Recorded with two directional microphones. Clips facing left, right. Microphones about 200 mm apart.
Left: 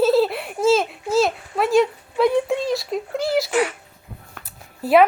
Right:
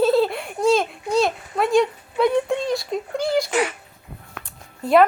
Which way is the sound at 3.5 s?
20° right (ahead or behind).